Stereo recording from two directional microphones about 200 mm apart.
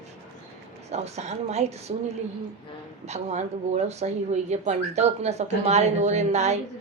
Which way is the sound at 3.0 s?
35° right (ahead or behind).